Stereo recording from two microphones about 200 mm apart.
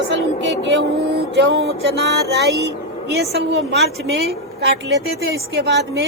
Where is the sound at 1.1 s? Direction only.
60° right (ahead or behind).